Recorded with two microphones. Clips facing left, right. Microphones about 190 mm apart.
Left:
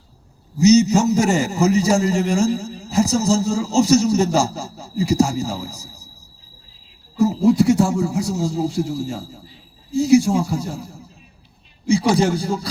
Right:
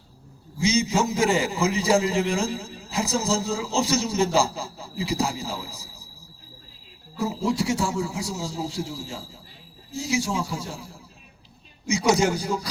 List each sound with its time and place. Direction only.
0.6 s a man's voice: 45° left (ahead or behind)
7.2 s a man's voice: 45° left (ahead or behind)
11.9 s speech: 30° left (ahead or behind)